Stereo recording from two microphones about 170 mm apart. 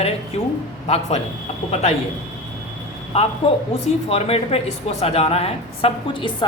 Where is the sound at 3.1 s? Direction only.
35° left (ahead or behind).